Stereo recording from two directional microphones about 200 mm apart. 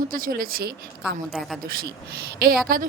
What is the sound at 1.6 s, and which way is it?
Speech, 50° right (ahead or behind).